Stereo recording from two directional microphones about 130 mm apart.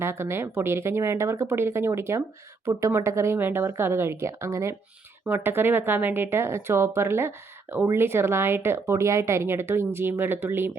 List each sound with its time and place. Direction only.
0.0 s speech: 20° right (ahead or behind)